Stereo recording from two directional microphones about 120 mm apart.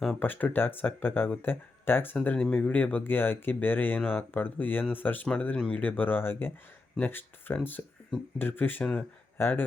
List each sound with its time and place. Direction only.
0.2 s speech: 15° left (ahead or behind)